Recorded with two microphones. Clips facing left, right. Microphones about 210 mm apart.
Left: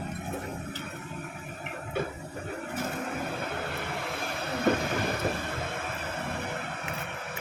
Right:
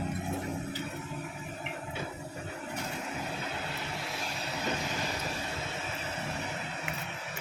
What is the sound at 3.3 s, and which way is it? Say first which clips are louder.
Vehicle: left 4 dB; 55° left (ahead or behind).